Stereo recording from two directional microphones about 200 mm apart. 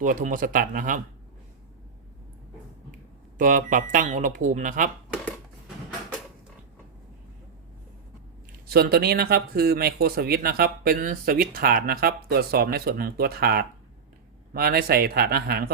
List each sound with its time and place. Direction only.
0.0 s speech: 40° right (ahead or behind)
3.3 s speech: 40° right (ahead or behind)
8.7 s speech: 50° right (ahead or behind)